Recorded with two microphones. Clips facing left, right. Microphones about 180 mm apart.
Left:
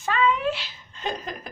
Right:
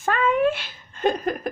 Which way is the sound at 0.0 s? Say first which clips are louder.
Right 3 dB; 50° right (ahead or behind).